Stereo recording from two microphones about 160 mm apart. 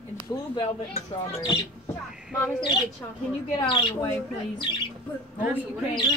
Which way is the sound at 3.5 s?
30° left (ahead or behind).